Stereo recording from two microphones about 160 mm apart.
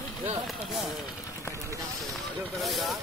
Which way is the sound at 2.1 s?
Centre (ahead or behind).